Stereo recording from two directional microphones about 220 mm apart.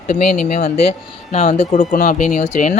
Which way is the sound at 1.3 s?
30° left (ahead or behind).